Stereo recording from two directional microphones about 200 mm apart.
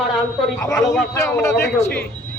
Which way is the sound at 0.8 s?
5° left (ahead or behind).